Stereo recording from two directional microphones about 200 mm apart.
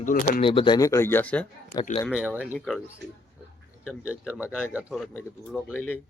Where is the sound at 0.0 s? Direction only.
45° left (ahead or behind).